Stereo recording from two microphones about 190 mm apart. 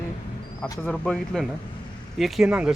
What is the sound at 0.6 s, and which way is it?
Speech, 5° left (ahead or behind).